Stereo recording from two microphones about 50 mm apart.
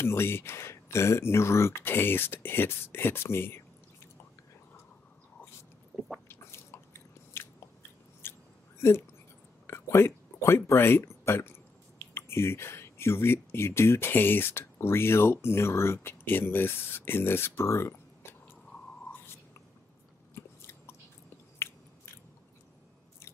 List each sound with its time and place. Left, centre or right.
0.0 s speech: left
6.2 s biting: left
8.2 s chewing: left
9.7 s speech: left
20.3 s chewing: left
21.6 s biting: left